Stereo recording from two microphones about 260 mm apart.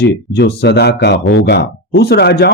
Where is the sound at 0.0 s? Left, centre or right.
Left.